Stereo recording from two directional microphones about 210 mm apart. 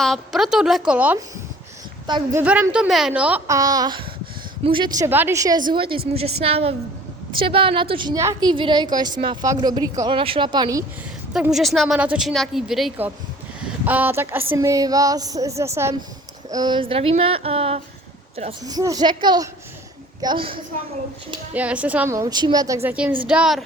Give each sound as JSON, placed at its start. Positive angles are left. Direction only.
{"t": 0.0, "sound": "a woman's voice", "side_deg": 0}
{"t": 2.0, "sound": "a woman's voice", "side_deg": -20}
{"t": 2.4, "sound": "a woman's voice", "side_deg": -5}
{"t": 5.0, "sound": "a woman's voice", "side_deg": -10}
{"t": 11.3, "sound": "a woman's voice", "side_deg": 0}
{"t": 18.6, "sound": "a woman's voice", "side_deg": -15}
{"t": 21.5, "sound": "a woman's voice", "side_deg": -5}